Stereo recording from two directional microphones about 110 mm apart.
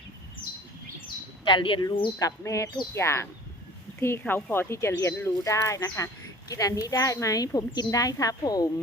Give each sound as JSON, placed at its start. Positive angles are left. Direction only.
{"t": 1.5, "sound": "speech", "side_deg": 50}
{"t": 2.1, "sound": "speech", "side_deg": 30}